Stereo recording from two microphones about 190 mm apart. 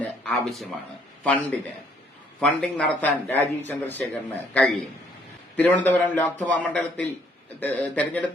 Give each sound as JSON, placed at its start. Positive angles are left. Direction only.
{"t": 0.0, "sound": "a man's voice", "side_deg": 5}